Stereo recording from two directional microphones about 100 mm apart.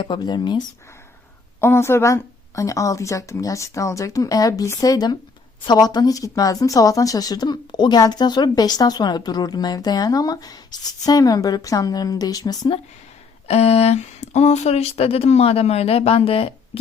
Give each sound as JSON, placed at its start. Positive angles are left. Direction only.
{"t": 0.0, "sound": "speech", "side_deg": 50}
{"t": 1.6, "sound": "speech", "side_deg": 25}
{"t": 13.5, "sound": "speech", "side_deg": 90}